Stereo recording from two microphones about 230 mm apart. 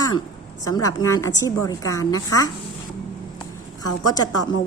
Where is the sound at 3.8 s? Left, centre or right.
Centre.